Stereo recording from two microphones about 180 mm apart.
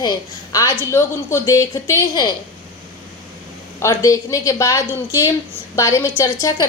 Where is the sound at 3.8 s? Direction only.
15° left (ahead or behind).